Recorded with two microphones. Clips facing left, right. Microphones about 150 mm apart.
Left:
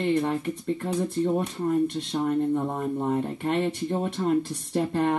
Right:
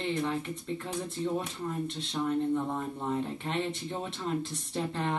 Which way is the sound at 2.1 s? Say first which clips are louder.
Left 4 dB; 45° left (ahead or behind).